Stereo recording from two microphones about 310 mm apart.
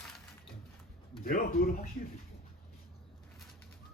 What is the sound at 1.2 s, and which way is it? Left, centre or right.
Speech, left.